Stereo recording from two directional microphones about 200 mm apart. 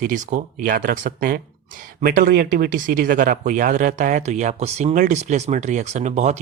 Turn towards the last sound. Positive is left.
turn(degrees=-35)  # may be behind; listen again after turning